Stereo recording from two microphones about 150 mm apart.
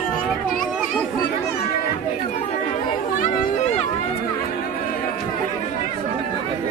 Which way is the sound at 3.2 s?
50° left (ahead or behind).